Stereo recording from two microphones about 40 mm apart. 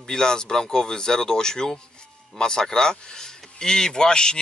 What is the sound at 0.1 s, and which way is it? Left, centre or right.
Speech, centre.